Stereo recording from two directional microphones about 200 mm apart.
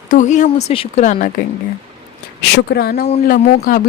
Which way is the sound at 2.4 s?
55° left (ahead or behind).